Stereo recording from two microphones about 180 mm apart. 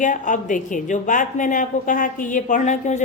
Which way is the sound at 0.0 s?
45° left (ahead or behind).